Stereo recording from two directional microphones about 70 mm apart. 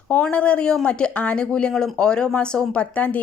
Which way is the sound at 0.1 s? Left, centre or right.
Centre.